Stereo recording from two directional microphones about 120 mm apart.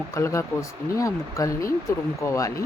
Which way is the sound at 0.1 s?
25° left (ahead or behind).